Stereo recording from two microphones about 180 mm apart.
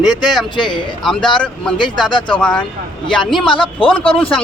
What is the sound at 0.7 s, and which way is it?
Speech, 5° left (ahead or behind).